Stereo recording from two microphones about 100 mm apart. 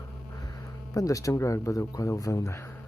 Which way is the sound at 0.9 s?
35° left (ahead or behind).